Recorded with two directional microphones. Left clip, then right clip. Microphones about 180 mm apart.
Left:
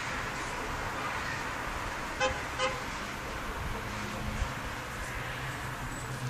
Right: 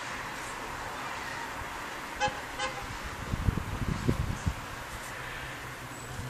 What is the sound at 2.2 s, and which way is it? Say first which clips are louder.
Vehicle: even; 15° left (ahead or behind).